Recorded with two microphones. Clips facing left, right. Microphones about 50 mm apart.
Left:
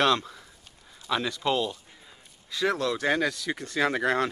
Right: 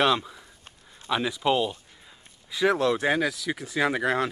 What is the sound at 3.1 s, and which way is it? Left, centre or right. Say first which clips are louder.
Speech: right 1 dB; centre.